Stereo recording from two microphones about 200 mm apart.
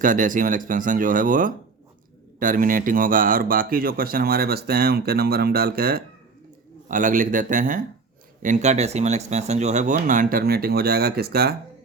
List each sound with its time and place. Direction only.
0.0 s speech: 40° right (ahead or behind)